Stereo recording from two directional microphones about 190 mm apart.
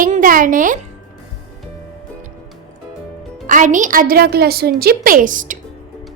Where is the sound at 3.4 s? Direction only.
40° right (ahead or behind).